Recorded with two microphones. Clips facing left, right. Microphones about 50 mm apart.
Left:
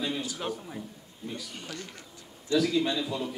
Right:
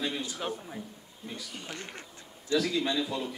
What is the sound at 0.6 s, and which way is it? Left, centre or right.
A man's voice, centre.